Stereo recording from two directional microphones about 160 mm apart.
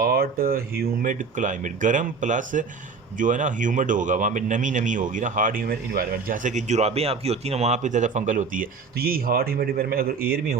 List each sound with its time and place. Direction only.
0.0 s speech: 65° right (ahead or behind)